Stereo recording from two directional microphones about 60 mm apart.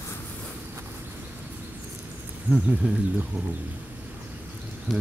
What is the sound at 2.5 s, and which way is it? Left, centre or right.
Speech, centre.